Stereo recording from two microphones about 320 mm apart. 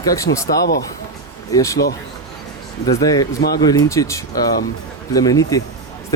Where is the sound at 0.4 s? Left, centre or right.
Left.